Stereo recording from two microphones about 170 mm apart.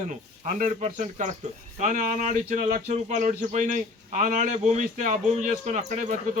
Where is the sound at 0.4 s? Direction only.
50° right (ahead or behind).